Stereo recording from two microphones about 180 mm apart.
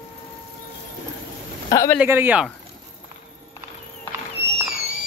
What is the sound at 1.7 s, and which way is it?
Speech, 20° left (ahead or behind).